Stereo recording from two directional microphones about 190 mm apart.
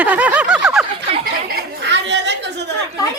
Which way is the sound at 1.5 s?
70° right (ahead or behind).